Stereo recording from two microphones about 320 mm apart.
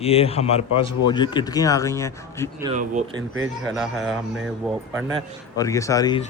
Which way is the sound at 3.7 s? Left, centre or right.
Centre.